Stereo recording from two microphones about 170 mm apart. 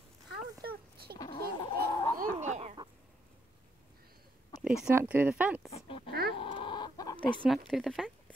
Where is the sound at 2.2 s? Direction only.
45° right (ahead or behind).